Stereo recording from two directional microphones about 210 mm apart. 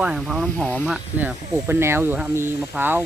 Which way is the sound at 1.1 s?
10° right (ahead or behind).